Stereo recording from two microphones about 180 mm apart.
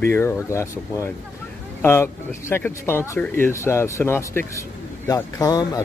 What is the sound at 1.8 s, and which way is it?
Speech, 15° left (ahead or behind).